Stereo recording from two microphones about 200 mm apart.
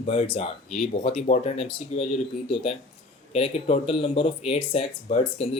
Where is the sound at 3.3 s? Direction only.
30° left (ahead or behind).